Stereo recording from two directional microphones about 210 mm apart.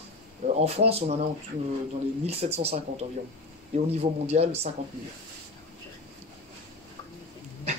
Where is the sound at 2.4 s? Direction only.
30° right (ahead or behind).